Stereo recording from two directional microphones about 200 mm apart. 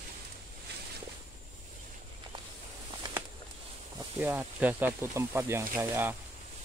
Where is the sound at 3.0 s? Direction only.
20° right (ahead or behind).